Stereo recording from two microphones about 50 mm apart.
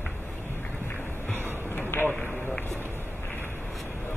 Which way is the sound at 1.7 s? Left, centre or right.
Left.